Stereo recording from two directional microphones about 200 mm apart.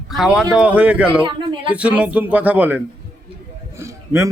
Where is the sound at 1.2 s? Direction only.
25° right (ahead or behind).